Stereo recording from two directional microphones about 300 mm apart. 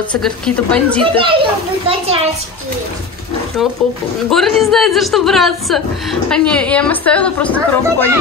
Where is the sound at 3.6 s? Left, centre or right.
Centre.